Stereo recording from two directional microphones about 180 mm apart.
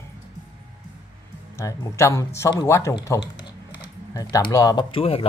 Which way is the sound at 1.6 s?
15° left (ahead or behind).